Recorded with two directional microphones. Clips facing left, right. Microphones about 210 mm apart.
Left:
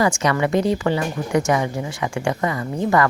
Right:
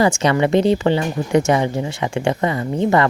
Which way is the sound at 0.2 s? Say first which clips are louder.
Right 4 dB; 25° right (ahead or behind).